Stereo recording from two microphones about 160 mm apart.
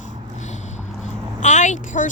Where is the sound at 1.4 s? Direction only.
50° left (ahead or behind).